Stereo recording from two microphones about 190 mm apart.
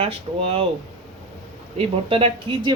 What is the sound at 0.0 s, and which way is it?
Speech, 30° right (ahead or behind).